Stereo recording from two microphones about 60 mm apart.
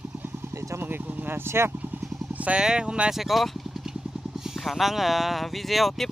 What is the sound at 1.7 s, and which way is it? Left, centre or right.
Vehicle, right.